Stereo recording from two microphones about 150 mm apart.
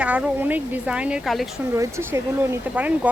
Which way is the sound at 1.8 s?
20° right (ahead or behind).